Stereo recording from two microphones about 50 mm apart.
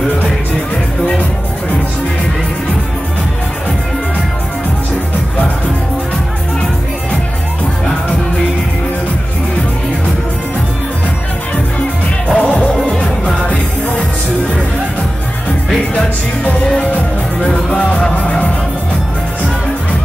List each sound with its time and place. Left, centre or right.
12.3 s music: left
15.9 s music: left